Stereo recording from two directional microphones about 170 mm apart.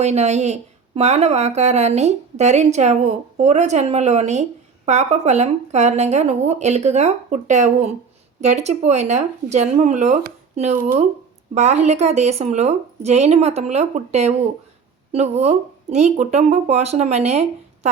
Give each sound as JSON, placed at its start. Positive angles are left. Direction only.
{"t": 0.0, "sound": "speech", "side_deg": -40}